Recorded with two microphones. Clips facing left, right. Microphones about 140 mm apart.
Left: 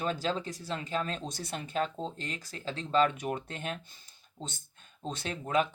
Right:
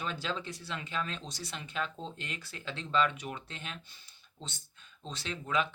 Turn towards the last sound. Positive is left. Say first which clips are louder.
# left 3 dB
turn(degrees=45)  # may be behind; listen again after turning